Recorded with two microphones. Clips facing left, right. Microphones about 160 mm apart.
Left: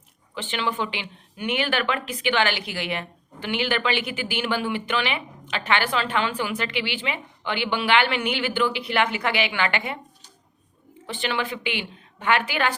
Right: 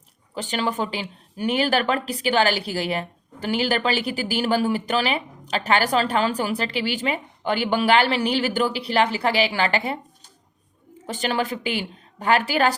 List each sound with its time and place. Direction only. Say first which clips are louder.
0.3 s speech: right 2 dB; 40° right (ahead or behind)
11.0 s speech: right 3 dB; 40° right (ahead or behind)